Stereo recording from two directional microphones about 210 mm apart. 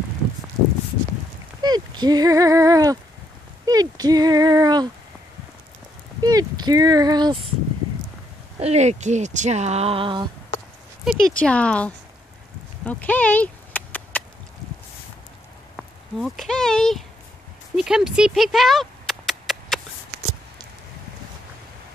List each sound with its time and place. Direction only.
1.6 s speech: 20° right (ahead or behind)
6.2 s speech: 20° right (ahead or behind)
8.5 s speech: 30° right (ahead or behind)
11.1 s speech: 5° left (ahead or behind)
12.8 s a sound: 5° left (ahead or behind)
15.7 s speech: centre (ahead or behind)
17.7 s a sound: centre (ahead or behind)